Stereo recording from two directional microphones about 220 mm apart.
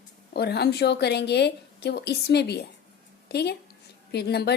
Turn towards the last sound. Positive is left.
turn(degrees=50)  # may be behind; listen again after turning